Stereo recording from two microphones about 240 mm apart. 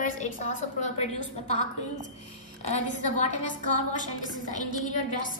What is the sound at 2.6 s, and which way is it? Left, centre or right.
A woman's voice, left.